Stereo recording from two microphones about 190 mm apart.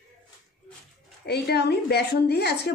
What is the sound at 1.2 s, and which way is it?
Speech, 60° left (ahead or behind).